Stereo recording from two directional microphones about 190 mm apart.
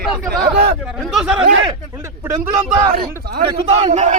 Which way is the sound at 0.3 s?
55° right (ahead or behind).